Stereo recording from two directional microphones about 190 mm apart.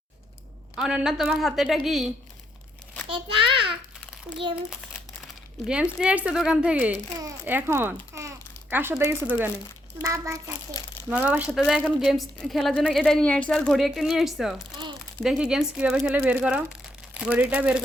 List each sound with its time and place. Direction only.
0.8 s a woman's voice: 5° right (ahead or behind)
3.1 s a sound: 30° right (ahead or behind)
5.6 s speech: 5° right (ahead or behind)
8.1 s babbling: 15° right (ahead or behind)
10.0 s a woman's voice: 15° right (ahead or behind)